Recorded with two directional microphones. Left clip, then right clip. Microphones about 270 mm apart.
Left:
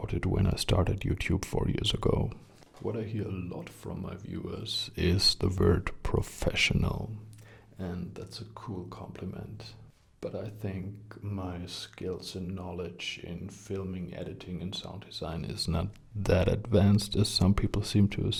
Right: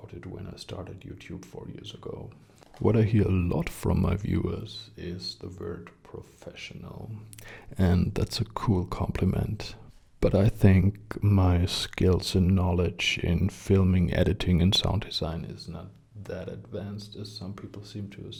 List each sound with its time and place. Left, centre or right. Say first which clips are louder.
0.0 s speech: left 10 dB; left
2.8 s speech: right 10 dB; right
4.9 s speech: left 12 dB; left
7.8 s speech: right 12 dB; right
15.5 s speech: left 9 dB; left
16.2 s speech: left 10 dB; left